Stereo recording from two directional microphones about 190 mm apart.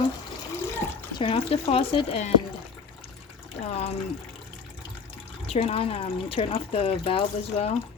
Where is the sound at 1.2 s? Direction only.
30° left (ahead or behind).